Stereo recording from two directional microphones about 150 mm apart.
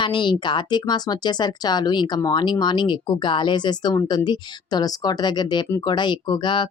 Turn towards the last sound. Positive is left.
turn(degrees=30)  # may be behind; listen again after turning